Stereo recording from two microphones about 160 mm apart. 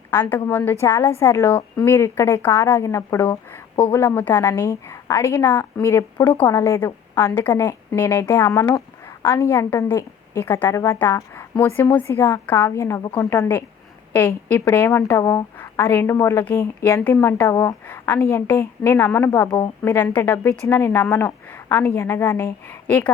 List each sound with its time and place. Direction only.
0.1 s a woman's voice: 10° left (ahead or behind)